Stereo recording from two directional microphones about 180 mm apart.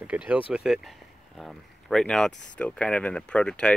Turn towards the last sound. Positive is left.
turn(degrees=5)  # may be behind; listen again after turning